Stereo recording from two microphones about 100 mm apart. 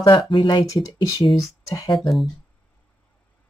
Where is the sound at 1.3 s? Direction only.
35° left (ahead or behind).